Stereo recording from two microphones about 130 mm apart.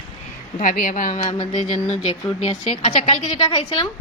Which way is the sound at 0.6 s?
90° left.